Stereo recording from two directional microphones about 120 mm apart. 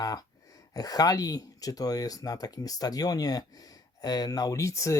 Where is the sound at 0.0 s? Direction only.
35° left (ahead or behind).